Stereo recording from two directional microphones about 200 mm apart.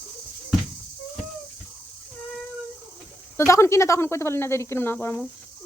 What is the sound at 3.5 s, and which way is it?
Speech, 15° left (ahead or behind).